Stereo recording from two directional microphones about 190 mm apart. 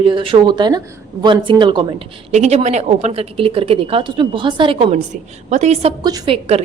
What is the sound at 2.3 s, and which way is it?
Speech, 35° right (ahead or behind).